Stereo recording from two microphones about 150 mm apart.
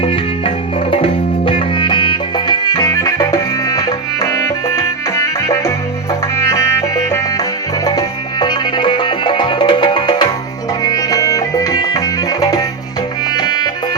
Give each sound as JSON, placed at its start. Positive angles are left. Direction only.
{"t": 0.0, "sound": "music", "side_deg": 40}
{"t": 7.9, "sound": "music", "side_deg": 30}